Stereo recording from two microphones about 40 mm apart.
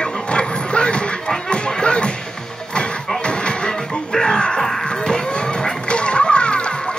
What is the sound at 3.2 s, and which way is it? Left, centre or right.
Music, left.